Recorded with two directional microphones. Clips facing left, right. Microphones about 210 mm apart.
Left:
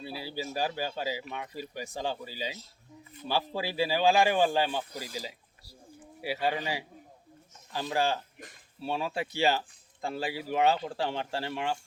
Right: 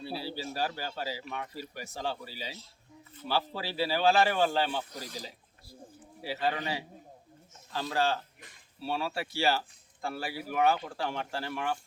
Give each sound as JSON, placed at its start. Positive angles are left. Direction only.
{"t": 0.2, "sound": "speech", "side_deg": 15}
{"t": 6.2, "sound": "speech", "side_deg": 15}